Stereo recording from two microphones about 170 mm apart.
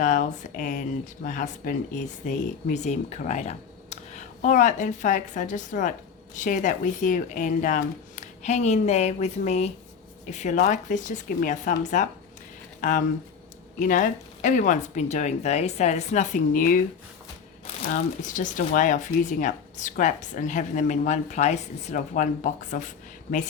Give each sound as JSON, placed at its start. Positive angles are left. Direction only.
{"t": 0.0, "sound": "speech", "side_deg": 45}
{"t": 17.9, "sound": "speech", "side_deg": 50}